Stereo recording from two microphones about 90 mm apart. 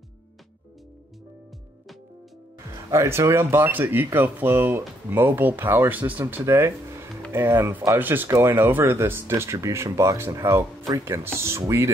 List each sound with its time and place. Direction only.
2.9 s speech: 30° right (ahead or behind)